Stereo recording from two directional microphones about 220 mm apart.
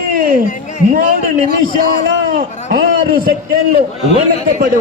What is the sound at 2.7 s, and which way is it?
A man's voice, 40° right (ahead or behind).